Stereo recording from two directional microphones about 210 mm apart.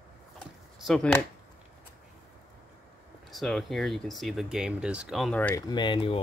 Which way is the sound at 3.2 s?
Centre (ahead or behind).